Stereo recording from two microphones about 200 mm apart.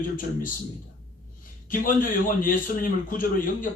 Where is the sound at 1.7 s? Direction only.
45° left (ahead or behind).